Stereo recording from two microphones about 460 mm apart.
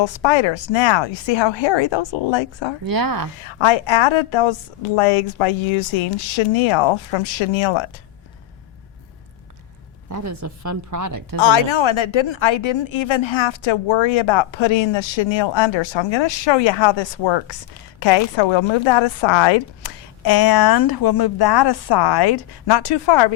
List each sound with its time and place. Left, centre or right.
0.0 s speech: left
2.8 s speech: right
3.4 s a woman's voice: left
10.1 s a woman's voice: right
11.3 s speech: left